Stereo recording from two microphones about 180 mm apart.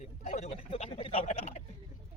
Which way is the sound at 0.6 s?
30° left (ahead or behind).